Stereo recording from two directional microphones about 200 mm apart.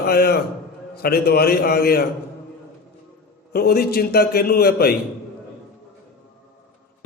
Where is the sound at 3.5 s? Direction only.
50° left (ahead or behind).